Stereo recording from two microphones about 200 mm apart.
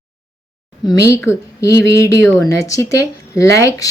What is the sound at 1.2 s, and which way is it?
Speech, 15° left (ahead or behind).